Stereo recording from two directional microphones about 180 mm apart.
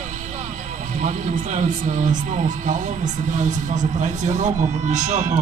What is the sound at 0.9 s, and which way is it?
A man's voice, 40° right (ahead or behind).